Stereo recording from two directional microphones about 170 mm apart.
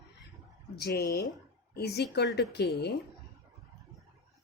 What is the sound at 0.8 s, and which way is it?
Speech, 70° left (ahead or behind).